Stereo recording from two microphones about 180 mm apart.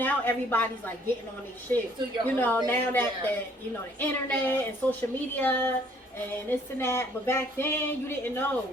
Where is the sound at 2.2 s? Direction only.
10° left (ahead or behind).